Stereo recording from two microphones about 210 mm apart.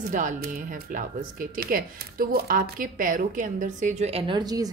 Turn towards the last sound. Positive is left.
turn(degrees=-20)  # may be behind; listen again after turning